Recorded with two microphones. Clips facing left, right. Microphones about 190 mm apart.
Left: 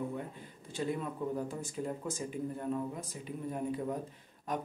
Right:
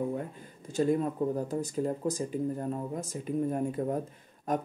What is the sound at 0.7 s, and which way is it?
Speech, 45° right (ahead or behind).